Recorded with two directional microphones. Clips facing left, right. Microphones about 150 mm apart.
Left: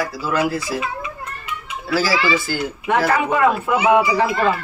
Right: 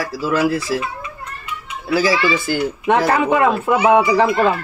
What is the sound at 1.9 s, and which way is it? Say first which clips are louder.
Speech: right 2 dB; 20° right (ahead or behind).